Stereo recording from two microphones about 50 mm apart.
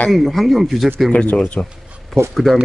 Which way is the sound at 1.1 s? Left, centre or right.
Left.